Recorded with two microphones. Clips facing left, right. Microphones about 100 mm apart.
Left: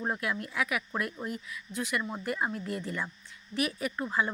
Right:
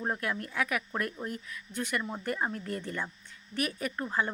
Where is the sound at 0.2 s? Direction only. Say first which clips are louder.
Even; 40° right (ahead or behind).